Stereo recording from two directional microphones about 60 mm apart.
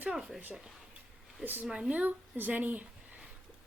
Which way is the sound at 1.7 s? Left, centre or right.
Centre.